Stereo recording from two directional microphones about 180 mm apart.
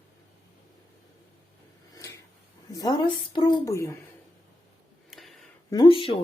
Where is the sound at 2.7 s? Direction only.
20° left (ahead or behind).